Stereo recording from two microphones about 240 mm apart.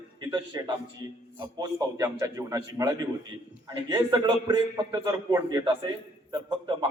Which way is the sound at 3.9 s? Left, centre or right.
Centre.